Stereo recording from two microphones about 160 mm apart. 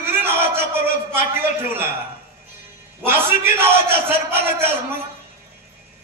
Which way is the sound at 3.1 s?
15° right (ahead or behind).